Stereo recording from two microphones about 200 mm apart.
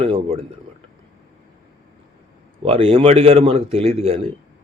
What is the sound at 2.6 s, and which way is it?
Speech, 30° right (ahead or behind).